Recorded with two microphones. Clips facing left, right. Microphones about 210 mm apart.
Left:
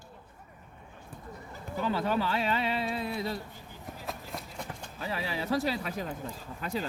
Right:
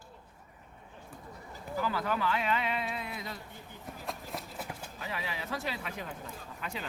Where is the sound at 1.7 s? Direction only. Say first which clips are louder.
Left 3 dB; 25° left (ahead or behind).